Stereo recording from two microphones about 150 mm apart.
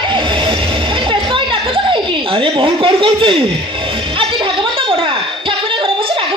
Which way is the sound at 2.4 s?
35° right (ahead or behind).